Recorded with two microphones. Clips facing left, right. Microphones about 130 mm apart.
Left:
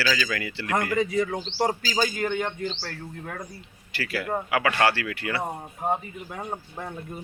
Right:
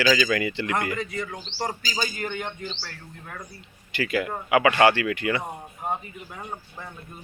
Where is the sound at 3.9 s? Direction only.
15° right (ahead or behind).